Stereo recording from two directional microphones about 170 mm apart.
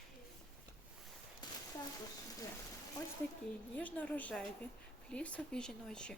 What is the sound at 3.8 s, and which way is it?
A woman's voice, 10° left (ahead or behind).